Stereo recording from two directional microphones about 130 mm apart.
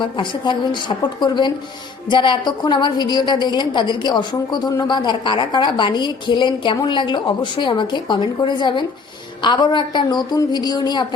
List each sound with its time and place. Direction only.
0.0 s a woman's voice: 40° left (ahead or behind)